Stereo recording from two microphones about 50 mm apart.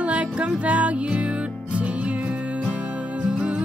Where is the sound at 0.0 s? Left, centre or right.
Right.